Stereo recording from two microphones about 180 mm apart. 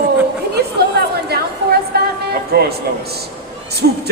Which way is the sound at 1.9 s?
60° right (ahead or behind).